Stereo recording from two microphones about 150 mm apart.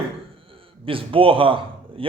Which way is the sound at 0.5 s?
35° right (ahead or behind).